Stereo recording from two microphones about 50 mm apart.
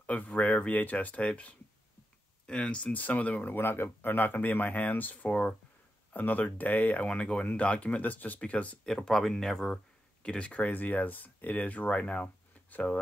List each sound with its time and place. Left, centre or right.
0.0 s speech: left
3.4 s speech: left
7.1 s speech: centre
8.8 s speech: centre
10.2 s speech: left
10.6 s speech: left